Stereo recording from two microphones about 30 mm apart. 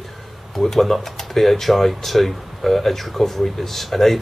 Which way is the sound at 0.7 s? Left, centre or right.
Centre.